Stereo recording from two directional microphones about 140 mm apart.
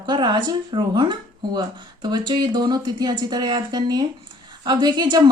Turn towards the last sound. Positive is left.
turn(degrees=-30)  # may be behind; listen again after turning